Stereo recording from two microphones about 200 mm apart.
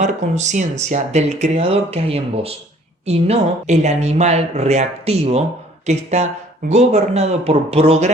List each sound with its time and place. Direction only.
0.0 s speech: 35° right (ahead or behind)